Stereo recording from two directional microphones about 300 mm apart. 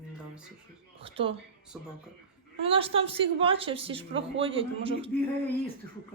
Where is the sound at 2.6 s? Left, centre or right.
Centre.